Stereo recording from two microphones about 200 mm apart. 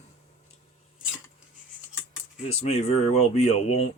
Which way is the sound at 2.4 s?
30° left (ahead or behind).